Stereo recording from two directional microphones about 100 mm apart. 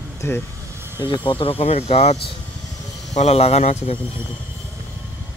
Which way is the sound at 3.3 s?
90° left.